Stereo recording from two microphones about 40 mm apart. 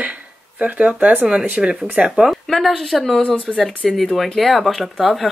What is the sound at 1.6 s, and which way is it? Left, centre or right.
Speech, centre.